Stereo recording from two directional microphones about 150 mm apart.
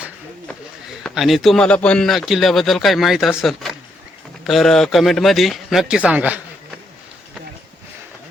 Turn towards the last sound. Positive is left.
turn(degrees=-10)  # may be behind; listen again after turning